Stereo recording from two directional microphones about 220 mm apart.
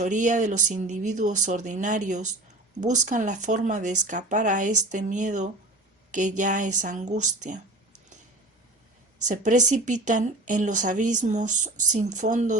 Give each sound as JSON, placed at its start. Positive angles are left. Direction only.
{"t": 0.0, "sound": "speech", "side_deg": -35}
{"t": 9.2, "sound": "speech", "side_deg": -35}